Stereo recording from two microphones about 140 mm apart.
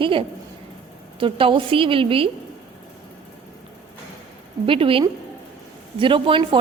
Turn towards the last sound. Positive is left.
turn(degrees=-40)  # may be behind; listen again after turning